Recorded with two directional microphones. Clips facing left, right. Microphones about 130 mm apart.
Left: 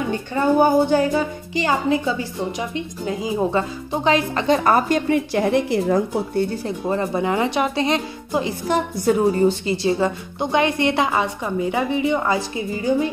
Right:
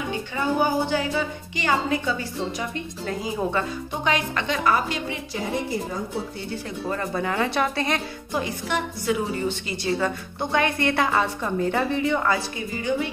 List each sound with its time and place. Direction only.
0.3 s a woman's voice: 45° left (ahead or behind)
5.3 s a woman's voice: 75° left (ahead or behind)
6.8 s a woman's voice: 20° left (ahead or behind)
8.6 s a woman's voice: 40° left (ahead or behind)
9.8 s a woman's voice: 25° left (ahead or behind)